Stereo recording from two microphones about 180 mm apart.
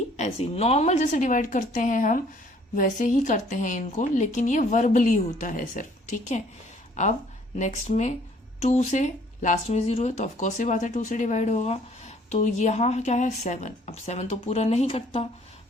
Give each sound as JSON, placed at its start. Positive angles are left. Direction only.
{"t": 0.2, "sound": "a woman's voice", "side_deg": 35}